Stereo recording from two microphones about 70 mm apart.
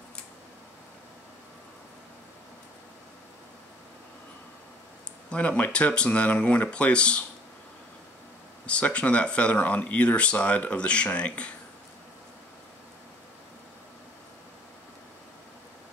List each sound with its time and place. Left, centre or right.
5.3 s speech: centre
8.6 s speech: centre